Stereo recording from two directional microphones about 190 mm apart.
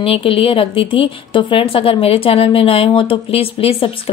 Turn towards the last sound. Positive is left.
turn(degrees=30)  # may be behind; listen again after turning